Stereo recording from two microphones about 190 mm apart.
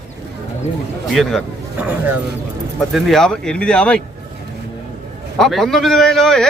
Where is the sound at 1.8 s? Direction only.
10° right (ahead or behind).